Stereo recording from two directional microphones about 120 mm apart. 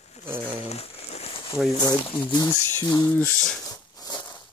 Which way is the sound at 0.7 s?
60° left (ahead or behind).